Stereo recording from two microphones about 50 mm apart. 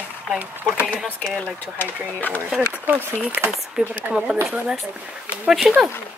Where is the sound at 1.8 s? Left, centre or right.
Left.